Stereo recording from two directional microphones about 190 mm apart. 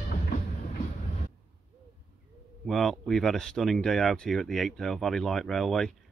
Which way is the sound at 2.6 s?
Centre (ahead or behind).